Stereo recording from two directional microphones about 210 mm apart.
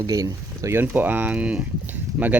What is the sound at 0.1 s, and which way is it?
Speech, 15° right (ahead or behind).